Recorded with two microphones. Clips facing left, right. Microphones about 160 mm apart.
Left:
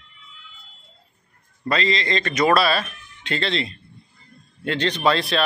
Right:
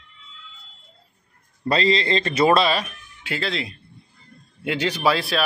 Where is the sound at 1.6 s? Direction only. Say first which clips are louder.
Right 3 dB; 30° right (ahead or behind); by 5.4 s 5° right (ahead or behind).